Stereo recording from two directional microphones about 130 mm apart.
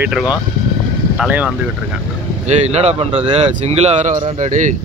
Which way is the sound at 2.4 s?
60° right (ahead or behind).